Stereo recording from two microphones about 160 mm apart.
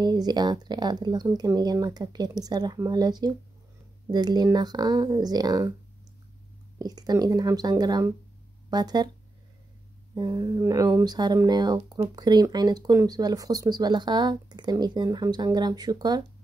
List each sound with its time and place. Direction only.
0.0 s speech: 25° right (ahead or behind)
6.8 s speech: 25° right (ahead or behind)
10.1 s speech: 25° right (ahead or behind)